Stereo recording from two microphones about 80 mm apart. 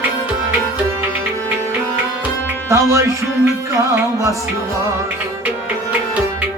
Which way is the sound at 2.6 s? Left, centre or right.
Right.